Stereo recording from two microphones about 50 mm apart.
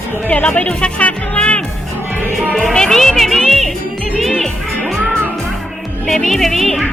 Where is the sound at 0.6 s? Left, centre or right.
Left.